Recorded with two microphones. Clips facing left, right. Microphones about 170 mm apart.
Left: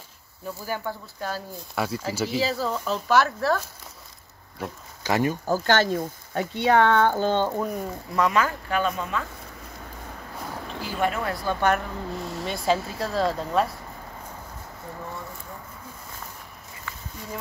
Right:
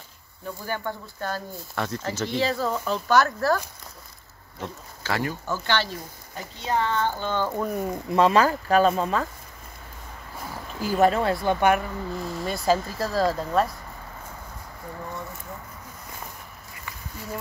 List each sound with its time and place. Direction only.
0.7 s speech: 5° left (ahead or behind)
4.6 s speech: 15° left (ahead or behind)
5.5 s speech: 45° left (ahead or behind)
6.3 s speech: 75° left (ahead or behind)
7.2 s speech: 35° left (ahead or behind)
7.5 s speech: centre (ahead or behind)
7.9 s speech: 25° right (ahead or behind)
10.8 s speech: 40° right (ahead or behind)
11.4 s speech: 15° right (ahead or behind)
12.2 s speech: centre (ahead or behind)
16.9 s a sound: 15° right (ahead or behind)